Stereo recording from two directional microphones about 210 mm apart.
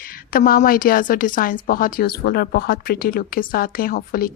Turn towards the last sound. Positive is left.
turn(degrees=45)  # may be behind; listen again after turning